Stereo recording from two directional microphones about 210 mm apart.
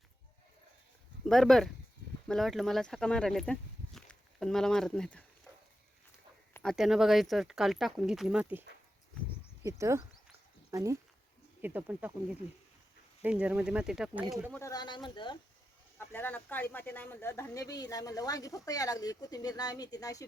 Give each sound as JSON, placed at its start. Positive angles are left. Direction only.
{"t": 1.3, "sound": "speech", "side_deg": 0}
{"t": 6.5, "sound": "speech", "side_deg": 5}
{"t": 9.6, "sound": "speech", "side_deg": -15}
{"t": 14.5, "sound": "speech", "side_deg": 15}
{"t": 16.0, "sound": "speech", "side_deg": 10}